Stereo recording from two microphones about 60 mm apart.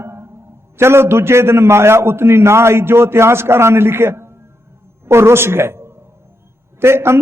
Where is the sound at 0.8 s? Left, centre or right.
Right.